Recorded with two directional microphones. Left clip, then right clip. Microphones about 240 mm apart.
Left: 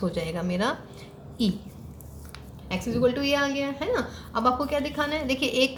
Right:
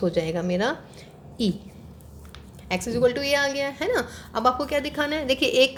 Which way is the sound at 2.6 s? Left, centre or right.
Right.